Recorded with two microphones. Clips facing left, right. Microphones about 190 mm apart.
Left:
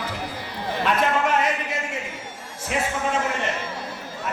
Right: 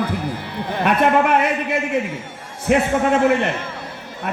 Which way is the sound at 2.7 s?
60° right (ahead or behind).